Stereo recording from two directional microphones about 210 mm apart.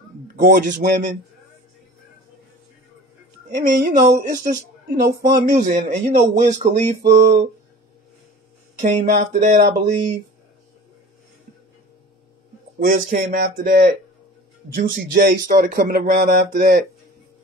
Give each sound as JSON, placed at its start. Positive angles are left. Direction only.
{"t": 0.4, "sound": "speech", "side_deg": -40}
{"t": 3.5, "sound": "speech", "side_deg": -45}
{"t": 8.8, "sound": "speech", "side_deg": -35}
{"t": 12.7, "sound": "speech", "side_deg": -40}